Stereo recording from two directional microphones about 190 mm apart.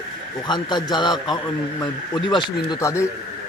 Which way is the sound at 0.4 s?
25° left (ahead or behind).